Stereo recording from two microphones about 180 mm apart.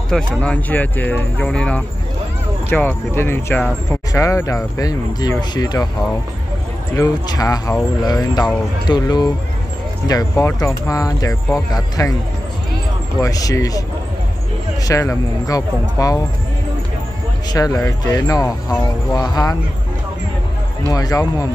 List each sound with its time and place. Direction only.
0.1 s speech: 5° left (ahead or behind); by 5.9 s 20° left (ahead or behind)
7.0 s speech: 20° left (ahead or behind)
10.3 s speech: 15° left (ahead or behind)
13.2 s speech: 20° left (ahead or behind)
14.9 s speech: 20° left (ahead or behind)
17.5 s speech: 20° left (ahead or behind)
20.9 s speech: 20° left (ahead or behind)